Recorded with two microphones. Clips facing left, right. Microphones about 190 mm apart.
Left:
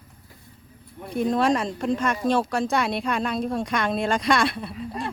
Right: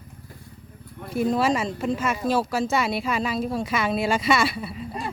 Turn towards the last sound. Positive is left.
turn(degrees=-5)  # may be behind; listen again after turning